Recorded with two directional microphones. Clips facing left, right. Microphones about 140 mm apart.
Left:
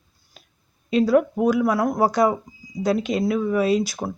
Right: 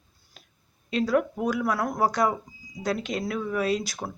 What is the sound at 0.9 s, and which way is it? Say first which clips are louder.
Speech: left 6 dB; 10° left (ahead or behind).